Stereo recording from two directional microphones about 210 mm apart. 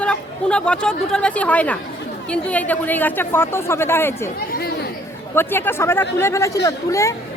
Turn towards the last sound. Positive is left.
turn(degrees=15)  # may be behind; listen again after turning